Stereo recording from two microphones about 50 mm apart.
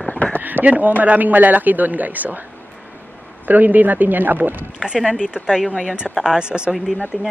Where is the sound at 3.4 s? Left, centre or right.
Right.